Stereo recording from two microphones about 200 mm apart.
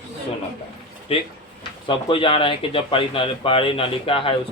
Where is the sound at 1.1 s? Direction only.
30° left (ahead or behind).